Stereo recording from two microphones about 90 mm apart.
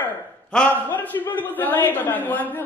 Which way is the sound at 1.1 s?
25° left (ahead or behind).